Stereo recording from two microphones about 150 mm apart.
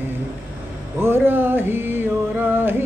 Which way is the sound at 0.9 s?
15° right (ahead or behind).